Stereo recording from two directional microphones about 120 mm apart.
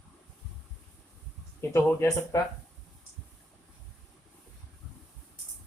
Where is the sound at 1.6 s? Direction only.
20° left (ahead or behind).